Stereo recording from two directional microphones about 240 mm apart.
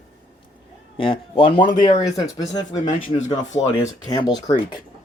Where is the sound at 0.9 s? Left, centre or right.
Left.